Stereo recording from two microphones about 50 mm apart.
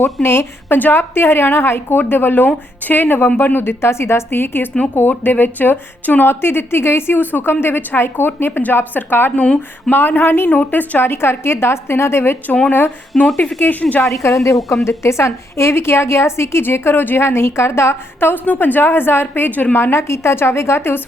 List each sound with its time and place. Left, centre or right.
0.0 s a woman's voice: left
0.8 s a woman's voice: left
10.5 s a woman's voice: left
13.1 s speech: centre
13.6 s a woman's voice: left
14.0 s a woman's voice: left
14.8 s a woman's voice: left
16.6 s a woman's voice: left
18.4 s a woman's voice: left
19.4 s a woman's voice: left
19.7 s a woman's voice: left